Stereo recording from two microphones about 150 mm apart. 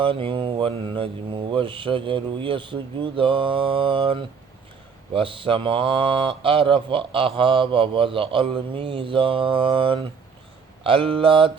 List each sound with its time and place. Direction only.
0.0 s speech: 35° right (ahead or behind)